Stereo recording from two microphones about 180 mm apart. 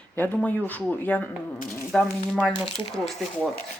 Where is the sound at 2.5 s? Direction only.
25° left (ahead or behind).